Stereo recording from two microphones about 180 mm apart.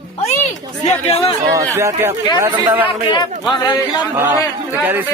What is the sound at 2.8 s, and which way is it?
Speech, 30° left (ahead or behind).